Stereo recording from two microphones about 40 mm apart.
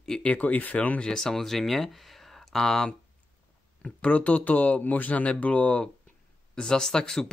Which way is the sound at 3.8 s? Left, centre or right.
Left.